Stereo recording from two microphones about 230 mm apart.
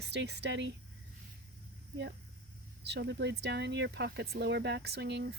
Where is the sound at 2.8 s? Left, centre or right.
Right.